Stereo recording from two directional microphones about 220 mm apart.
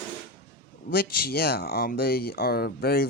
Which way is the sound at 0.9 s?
40° left (ahead or behind).